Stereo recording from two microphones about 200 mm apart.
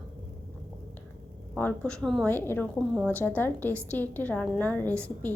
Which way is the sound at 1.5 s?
5° left (ahead or behind).